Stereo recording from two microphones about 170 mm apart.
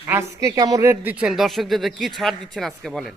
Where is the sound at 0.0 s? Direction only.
15° right (ahead or behind).